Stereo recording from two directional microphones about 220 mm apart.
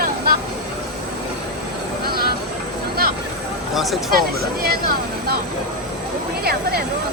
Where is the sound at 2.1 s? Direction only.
45° right (ahead or behind).